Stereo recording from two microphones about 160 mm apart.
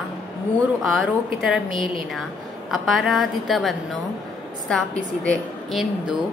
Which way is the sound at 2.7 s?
Centre (ahead or behind).